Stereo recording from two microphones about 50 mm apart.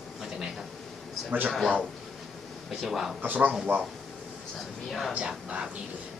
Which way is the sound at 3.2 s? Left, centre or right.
Right.